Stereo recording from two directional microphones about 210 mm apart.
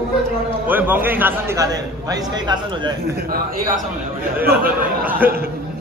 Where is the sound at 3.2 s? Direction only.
45° right (ahead or behind).